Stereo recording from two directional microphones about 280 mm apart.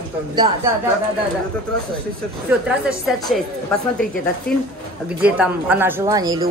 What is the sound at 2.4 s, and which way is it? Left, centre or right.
Speech, centre.